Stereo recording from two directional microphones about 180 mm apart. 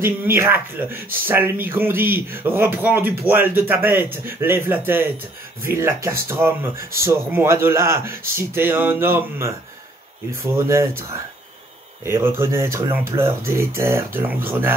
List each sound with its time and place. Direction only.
0.0 s speech: 15° right (ahead or behind)